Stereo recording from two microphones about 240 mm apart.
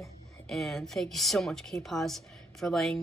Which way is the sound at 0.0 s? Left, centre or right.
Centre.